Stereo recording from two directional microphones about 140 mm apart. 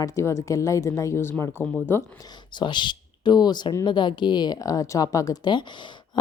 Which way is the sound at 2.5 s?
35° left (ahead or behind).